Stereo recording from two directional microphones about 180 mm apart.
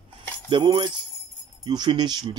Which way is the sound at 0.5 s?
25° right (ahead or behind).